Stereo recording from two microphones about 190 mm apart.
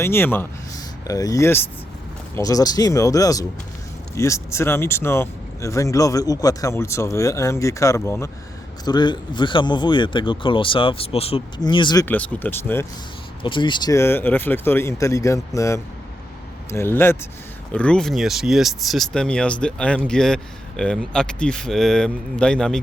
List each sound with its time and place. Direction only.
0.0 s speech: 10° left (ahead or behind)
12.0 s speech: 10° left (ahead or behind)
13.4 s speech: 25° left (ahead or behind); by 22.8 s 5° left (ahead or behind)